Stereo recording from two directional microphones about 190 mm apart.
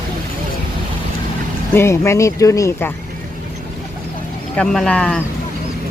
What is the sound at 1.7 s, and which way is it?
Speech, 15° left (ahead or behind).